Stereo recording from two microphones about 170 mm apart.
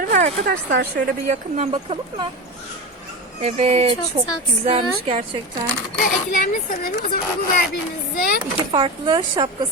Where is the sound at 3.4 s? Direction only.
40° right (ahead or behind).